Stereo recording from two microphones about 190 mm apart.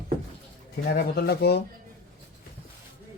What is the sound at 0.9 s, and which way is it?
Speech, 60° left (ahead or behind).